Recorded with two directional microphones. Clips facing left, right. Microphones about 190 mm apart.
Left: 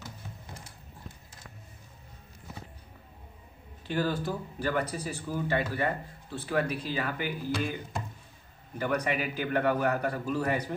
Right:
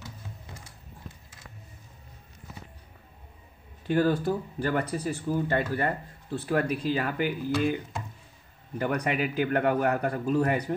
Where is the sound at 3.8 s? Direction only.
50° right (ahead or behind).